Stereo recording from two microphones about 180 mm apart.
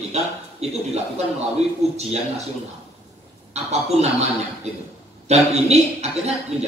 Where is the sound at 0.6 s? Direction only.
35° right (ahead or behind).